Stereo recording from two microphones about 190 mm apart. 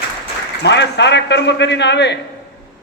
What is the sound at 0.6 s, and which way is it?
A man's voice, 65° left (ahead or behind).